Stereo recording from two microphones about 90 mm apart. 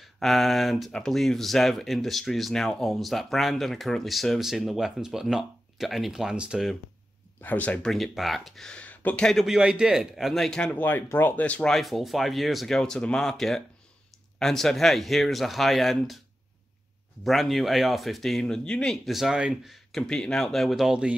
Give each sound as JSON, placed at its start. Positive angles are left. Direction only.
{"t": 0.0, "sound": "speech", "side_deg": 0}
{"t": 7.4, "sound": "speech", "side_deg": 15}
{"t": 7.9, "sound": "speech", "side_deg": 0}
{"t": 9.6, "sound": "speech", "side_deg": -10}
{"t": 17.2, "sound": "speech", "side_deg": 0}
{"t": 19.0, "sound": "speech", "side_deg": -5}